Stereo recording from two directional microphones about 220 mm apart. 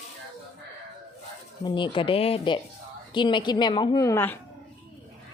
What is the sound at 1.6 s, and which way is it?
A woman's voice, 20° left (ahead or behind).